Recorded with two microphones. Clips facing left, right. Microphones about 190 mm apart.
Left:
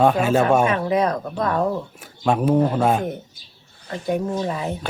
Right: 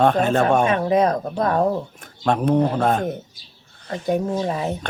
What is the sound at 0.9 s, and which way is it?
Speech, 20° right (ahead or behind).